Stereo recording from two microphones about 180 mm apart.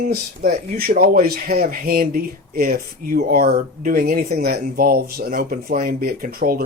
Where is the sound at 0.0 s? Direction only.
55° right (ahead or behind).